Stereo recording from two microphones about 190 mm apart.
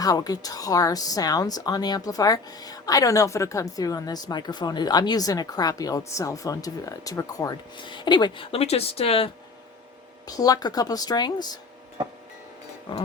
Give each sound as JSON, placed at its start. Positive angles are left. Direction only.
{"t": 0.0, "sound": "speech", "side_deg": 20}
{"t": 10.2, "sound": "speech", "side_deg": 20}